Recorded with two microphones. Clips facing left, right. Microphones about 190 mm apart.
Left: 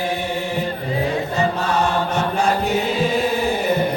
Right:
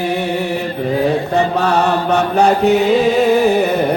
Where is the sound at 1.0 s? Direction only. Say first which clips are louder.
Right 5 dB; 65° right (ahead or behind).